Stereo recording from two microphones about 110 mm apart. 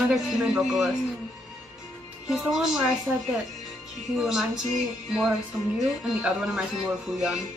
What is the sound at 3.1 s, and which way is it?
Speech, 15° right (ahead or behind).